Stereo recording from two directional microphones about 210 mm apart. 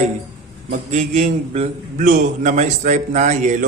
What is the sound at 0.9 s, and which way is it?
A man's voice, 35° right (ahead or behind).